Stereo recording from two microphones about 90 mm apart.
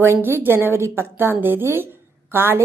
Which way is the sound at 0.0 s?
25° right (ahead or behind).